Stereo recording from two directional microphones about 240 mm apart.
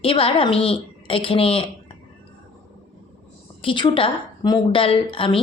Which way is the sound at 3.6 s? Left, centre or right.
Left.